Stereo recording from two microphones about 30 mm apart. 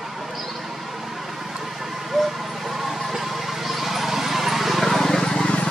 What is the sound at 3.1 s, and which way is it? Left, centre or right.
Vehicle, centre.